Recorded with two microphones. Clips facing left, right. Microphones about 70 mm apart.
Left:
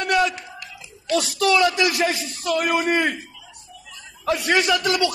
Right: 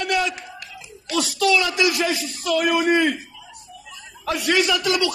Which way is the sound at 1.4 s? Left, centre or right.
Left.